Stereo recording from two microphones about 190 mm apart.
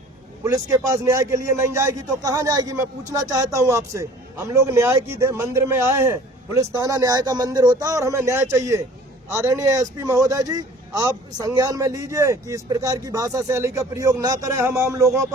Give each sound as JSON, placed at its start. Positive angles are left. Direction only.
{"t": 0.4, "sound": "a man's voice", "side_deg": -15}